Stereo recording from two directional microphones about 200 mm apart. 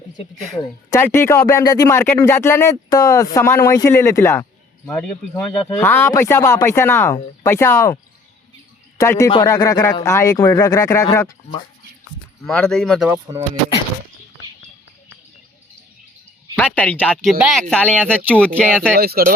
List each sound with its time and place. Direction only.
0.9 s speech: 10° left (ahead or behind)
5.6 s speech: 10° left (ahead or behind)
9.0 s speech: 15° left (ahead or behind)
12.5 s speech: 5° left (ahead or behind)
13.3 s speech: 20° right (ahead or behind)
16.6 s speech: 5° left (ahead or behind)
18.9 s speech: 50° right (ahead or behind)